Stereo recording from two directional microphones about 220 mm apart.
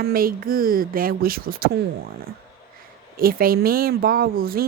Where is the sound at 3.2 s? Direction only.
40° right (ahead or behind).